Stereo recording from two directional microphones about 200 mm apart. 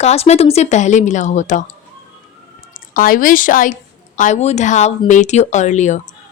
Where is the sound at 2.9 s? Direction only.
45° left (ahead or behind).